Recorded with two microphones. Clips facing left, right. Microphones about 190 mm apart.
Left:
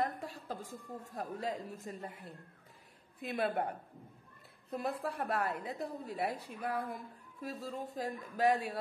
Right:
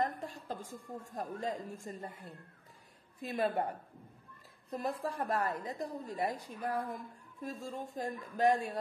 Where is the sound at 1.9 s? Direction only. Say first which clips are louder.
Left 1 dB; centre (ahead or behind).